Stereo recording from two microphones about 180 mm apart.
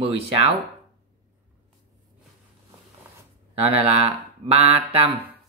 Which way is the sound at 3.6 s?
35° right (ahead or behind).